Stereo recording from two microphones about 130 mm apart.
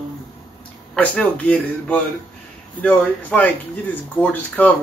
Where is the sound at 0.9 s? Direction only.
10° left (ahead or behind).